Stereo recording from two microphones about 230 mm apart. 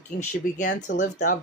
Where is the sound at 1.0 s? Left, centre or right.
Left.